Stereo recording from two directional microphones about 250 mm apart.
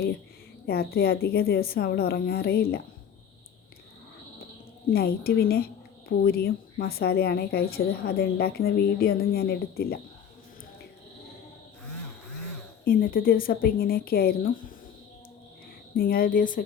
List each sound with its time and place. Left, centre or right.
0.7 s a woman's voice: left
4.9 s a woman's voice: left
12.8 s a woman's voice: left
16.0 s a woman's voice: left